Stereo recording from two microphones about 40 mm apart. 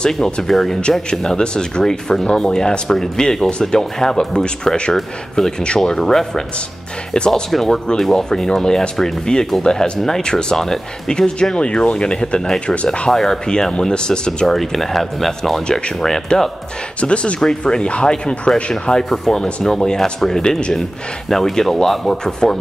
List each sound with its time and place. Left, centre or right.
0.1 s speech: centre
7.5 s speech: centre; by 13.1 s left
13.1 s speech: centre
14.5 s speech: centre
17.0 s speech: left